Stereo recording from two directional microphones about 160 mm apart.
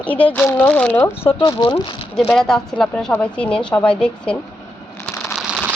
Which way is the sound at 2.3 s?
5° left (ahead or behind).